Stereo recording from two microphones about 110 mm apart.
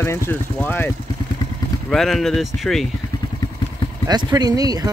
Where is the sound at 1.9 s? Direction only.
Centre (ahead or behind).